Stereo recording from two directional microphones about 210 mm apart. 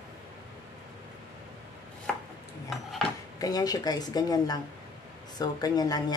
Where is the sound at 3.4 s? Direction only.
15° left (ahead or behind).